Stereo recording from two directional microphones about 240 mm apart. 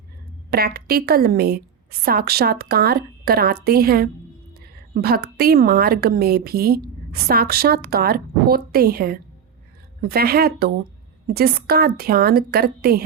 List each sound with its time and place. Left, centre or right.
0.5 s speech: right